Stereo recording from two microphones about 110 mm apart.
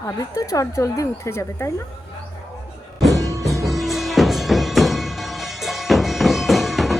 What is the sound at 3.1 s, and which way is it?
Music, 30° right (ahead or behind).